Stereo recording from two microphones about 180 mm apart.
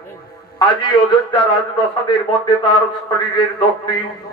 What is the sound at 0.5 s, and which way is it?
A man's voice, 25° left (ahead or behind).